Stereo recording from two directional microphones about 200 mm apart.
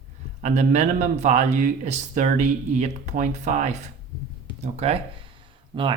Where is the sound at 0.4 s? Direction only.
35° right (ahead or behind).